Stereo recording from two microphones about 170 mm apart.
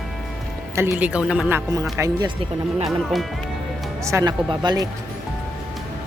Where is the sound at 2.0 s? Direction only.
25° right (ahead or behind).